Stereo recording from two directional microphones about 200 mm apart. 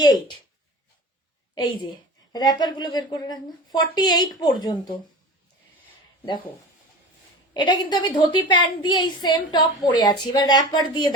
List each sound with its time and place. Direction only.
0.0 s a woman's voice: 20° left (ahead or behind)
1.5 s a woman's voice: 20° left (ahead or behind)
7.5 s a woman's voice: 20° left (ahead or behind)